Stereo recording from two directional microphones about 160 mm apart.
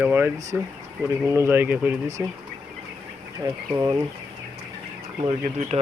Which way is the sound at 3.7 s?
15° right (ahead or behind).